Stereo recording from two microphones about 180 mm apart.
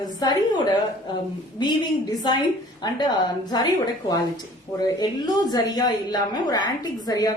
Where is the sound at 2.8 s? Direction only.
25° left (ahead or behind).